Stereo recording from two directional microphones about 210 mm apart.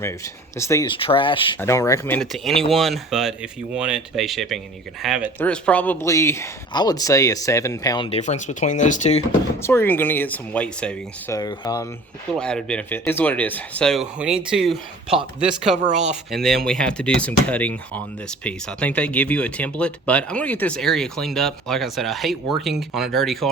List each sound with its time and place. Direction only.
0.0 s speech: 15° left (ahead or behind)
1.5 s speech: 15° left (ahead or behind); by 9.2 s 35° left (ahead or behind)
9.6 s speech: 10° left (ahead or behind)
11.3 s speech: 20° left (ahead or behind)
12.4 s speech: 5° left (ahead or behind)